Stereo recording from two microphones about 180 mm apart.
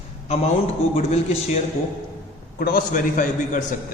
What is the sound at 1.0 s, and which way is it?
Speech, 35° left (ahead or behind).